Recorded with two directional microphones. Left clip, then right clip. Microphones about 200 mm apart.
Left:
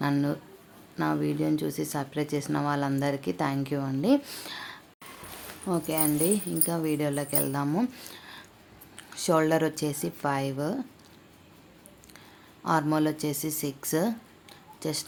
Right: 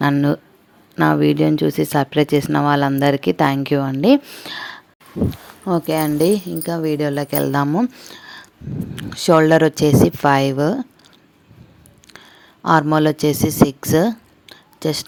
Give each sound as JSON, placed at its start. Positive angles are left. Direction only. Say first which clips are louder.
{"t": 0.0, "sound": "speech", "louder": "right 11 dB", "side_deg": -35}
{"t": 4.2, "sound": "speech", "louder": "right 4 dB", "side_deg": -25}
{"t": 4.4, "sound": "a sound", "louder": "right 10 dB", "side_deg": -35}
{"t": 5.6, "sound": "speech", "louder": "right 10 dB", "side_deg": -40}
{"t": 7.7, "sound": "speech", "louder": "right 9 dB", "side_deg": -30}
{"t": 12.6, "sound": "speech", "louder": "right 11 dB", "side_deg": -40}